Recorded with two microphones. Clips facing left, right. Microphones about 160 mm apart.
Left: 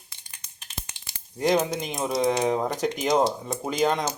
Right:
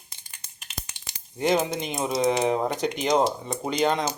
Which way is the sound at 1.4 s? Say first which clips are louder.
Even; centre (ahead or behind).